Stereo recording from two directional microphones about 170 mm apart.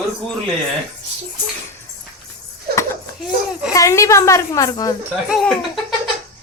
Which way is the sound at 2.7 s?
65° right (ahead or behind).